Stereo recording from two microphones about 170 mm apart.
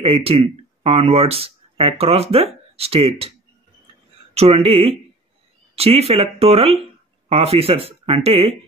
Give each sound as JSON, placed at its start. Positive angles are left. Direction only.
{"t": 0.0, "sound": "speech", "side_deg": -35}